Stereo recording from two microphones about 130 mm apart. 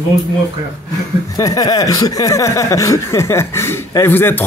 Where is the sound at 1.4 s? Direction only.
25° left (ahead or behind).